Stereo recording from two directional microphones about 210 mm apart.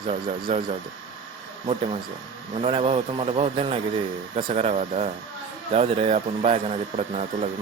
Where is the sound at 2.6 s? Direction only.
30° right (ahead or behind).